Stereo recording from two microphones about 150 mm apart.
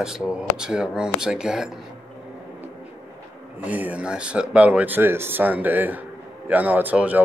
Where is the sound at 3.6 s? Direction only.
10° right (ahead or behind).